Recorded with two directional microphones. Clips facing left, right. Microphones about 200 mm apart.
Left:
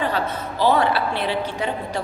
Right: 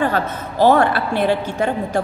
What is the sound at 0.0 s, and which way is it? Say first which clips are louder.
A woman's voice: right 4 dB; 50° right (ahead or behind).